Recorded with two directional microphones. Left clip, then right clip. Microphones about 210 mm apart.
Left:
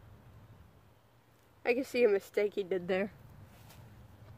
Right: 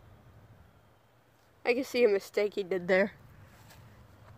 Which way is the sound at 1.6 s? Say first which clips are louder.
Right 2 dB; 30° right (ahead or behind).